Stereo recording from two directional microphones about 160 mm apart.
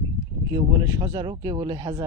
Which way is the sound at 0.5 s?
25° right (ahead or behind).